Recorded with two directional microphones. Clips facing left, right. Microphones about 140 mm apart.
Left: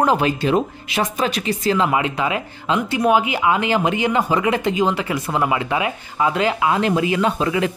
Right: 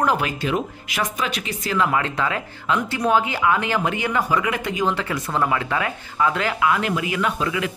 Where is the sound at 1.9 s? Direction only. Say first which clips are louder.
Left 3 dB; 15° left (ahead or behind).